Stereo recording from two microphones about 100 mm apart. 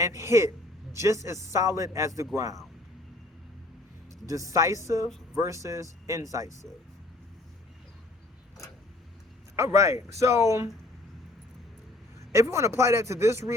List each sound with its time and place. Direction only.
0.0 s speech: 30° right (ahead or behind)
4.5 s speech: 30° right (ahead or behind)
9.6 s speech: 30° right (ahead or behind)
12.3 s speech: 25° right (ahead or behind)